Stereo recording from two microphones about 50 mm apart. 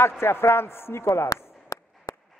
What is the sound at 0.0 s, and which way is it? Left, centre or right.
A man's voice, left.